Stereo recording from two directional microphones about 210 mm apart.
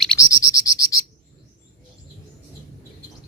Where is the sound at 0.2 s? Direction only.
15° left (ahead or behind).